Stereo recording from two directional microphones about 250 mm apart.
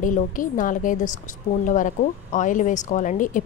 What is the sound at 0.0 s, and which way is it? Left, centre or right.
A woman's voice, left.